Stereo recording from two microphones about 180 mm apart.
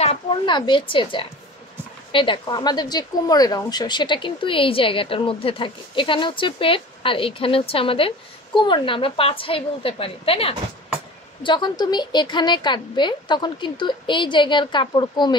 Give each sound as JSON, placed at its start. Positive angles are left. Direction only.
{"t": 0.0, "sound": "a woman's voice", "side_deg": 30}